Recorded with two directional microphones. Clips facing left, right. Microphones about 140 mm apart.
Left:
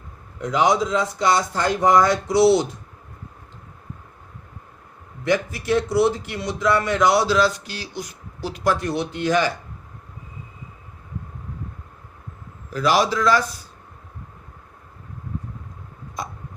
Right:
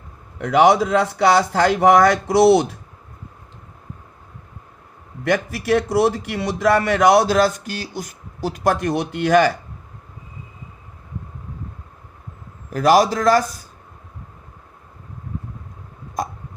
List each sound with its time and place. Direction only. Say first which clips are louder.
0.3 s a man's voice: right 5 dB; 65° right (ahead or behind)
5.2 s a man's voice: right 1 dB; 60° right (ahead or behind)
12.7 s a man's voice: right 5 dB; 45° right (ahead or behind)